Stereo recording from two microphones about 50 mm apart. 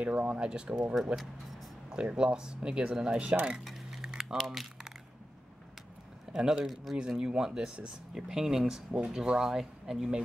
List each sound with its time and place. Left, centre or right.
0.0 s speech: right
1.9 s speech: centre
3.6 s a sound: centre
6.3 s speech: centre
6.7 s speech: centre
7.1 s speech: centre